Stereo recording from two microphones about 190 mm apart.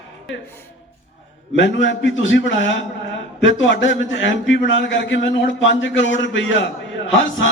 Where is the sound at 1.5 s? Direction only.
75° left (ahead or behind).